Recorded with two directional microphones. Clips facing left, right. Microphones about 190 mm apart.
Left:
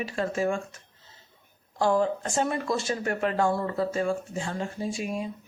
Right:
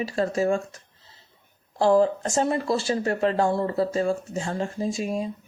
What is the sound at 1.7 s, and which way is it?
Speech, 35° right (ahead or behind).